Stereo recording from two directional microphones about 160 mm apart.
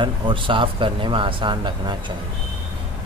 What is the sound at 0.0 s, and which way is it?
Speech, 30° right (ahead or behind).